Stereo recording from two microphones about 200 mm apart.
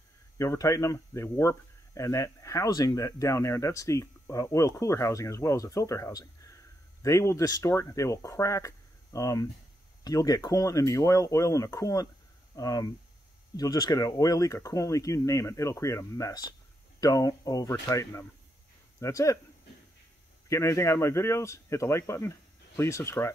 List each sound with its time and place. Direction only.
0.4 s speech: 15° left (ahead or behind)
20.4 s speech: 15° left (ahead or behind)